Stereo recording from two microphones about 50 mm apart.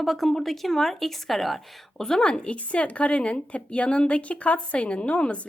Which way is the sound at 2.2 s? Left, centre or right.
Left.